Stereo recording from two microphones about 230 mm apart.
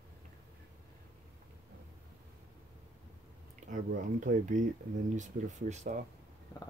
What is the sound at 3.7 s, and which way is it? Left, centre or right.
Speech, right.